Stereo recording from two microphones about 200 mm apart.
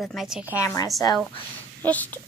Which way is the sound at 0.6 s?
15° left (ahead or behind).